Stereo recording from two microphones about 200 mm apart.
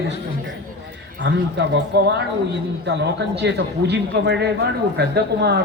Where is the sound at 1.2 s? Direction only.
60° right (ahead or behind).